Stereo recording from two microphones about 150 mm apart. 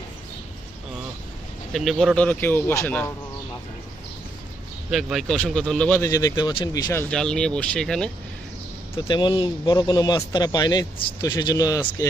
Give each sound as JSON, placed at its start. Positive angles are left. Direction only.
{"t": 1.7, "sound": "speech", "side_deg": 0}
{"t": 4.9, "sound": "speech", "side_deg": 0}
{"t": 7.1, "sound": "speech", "side_deg": 5}
{"t": 8.9, "sound": "a man's voice", "side_deg": 30}